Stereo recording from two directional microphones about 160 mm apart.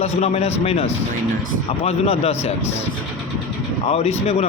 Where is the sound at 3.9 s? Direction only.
40° left (ahead or behind).